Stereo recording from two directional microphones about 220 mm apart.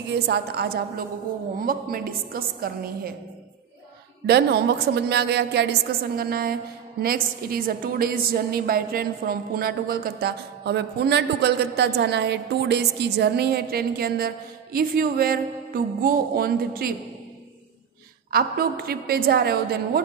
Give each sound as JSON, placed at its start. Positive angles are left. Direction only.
{"t": 0.1, "sound": "a woman's voice", "side_deg": -50}
{"t": 4.3, "sound": "a woman's voice", "side_deg": -50}
{"t": 18.3, "sound": "a woman's voice", "side_deg": -45}